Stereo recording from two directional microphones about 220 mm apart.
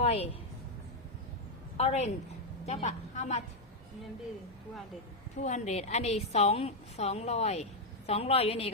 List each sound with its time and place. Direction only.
0.0 s a sound: 30° left (ahead or behind)
1.8 s a woman's voice: 30° left (ahead or behind)
5.4 s a woman's voice: 30° left (ahead or behind)